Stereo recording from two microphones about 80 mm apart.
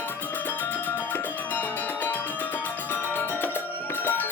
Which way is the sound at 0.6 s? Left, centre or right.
Left.